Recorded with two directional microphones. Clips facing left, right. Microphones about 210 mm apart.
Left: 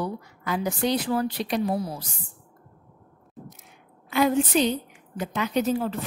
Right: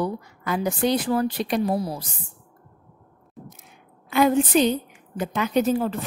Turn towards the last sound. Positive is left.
turn(degrees=-50)  # may be behind; listen again after turning